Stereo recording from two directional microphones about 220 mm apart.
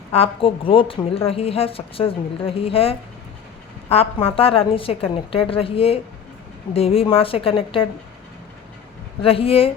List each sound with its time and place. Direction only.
0.1 s a woman's voice: 25° left (ahead or behind)
9.2 s a woman's voice: 25° left (ahead or behind)